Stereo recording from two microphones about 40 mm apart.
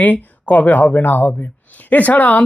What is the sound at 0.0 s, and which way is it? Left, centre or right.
Speech, left.